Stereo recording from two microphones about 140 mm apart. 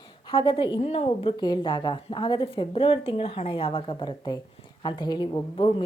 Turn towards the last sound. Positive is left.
turn(degrees=35)  # may be behind; listen again after turning